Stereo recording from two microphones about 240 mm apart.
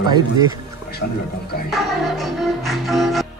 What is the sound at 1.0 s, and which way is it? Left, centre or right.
Speech, left.